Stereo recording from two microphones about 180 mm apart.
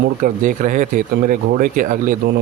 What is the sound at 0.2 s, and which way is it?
Speech, 45° right (ahead or behind).